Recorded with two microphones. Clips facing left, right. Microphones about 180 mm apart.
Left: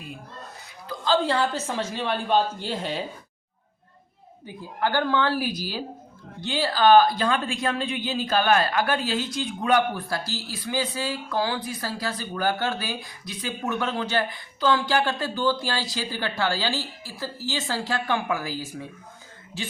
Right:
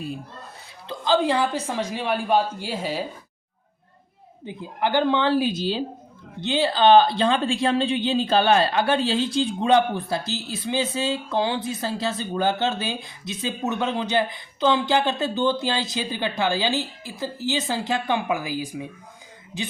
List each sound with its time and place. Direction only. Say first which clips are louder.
0.9 s a woman's voice: right 2 dB; 15° right (ahead or behind)
4.4 s a woman's voice: right 2 dB; 20° right (ahead or behind)